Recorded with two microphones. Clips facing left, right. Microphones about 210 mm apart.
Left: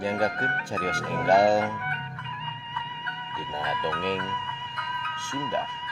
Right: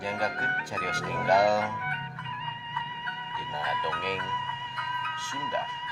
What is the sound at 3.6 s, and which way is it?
Speech, 55° left (ahead or behind).